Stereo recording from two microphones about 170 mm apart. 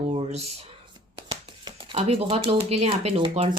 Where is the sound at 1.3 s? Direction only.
25° right (ahead or behind).